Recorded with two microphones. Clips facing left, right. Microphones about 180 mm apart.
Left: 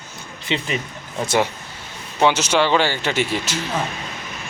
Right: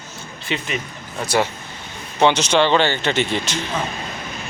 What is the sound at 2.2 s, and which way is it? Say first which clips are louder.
A man's voice: right 1 dB; 5° left (ahead or behind).